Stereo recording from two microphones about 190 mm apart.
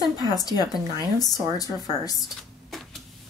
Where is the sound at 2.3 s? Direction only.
Centre (ahead or behind).